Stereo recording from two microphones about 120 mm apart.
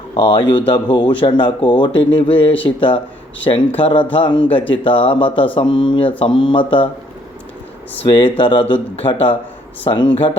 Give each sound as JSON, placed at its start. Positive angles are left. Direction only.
{"t": 0.1, "sound": "speech", "side_deg": 50}
{"t": 8.0, "sound": "speech", "side_deg": 45}